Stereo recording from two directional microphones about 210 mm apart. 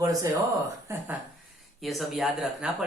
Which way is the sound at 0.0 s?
15° right (ahead or behind).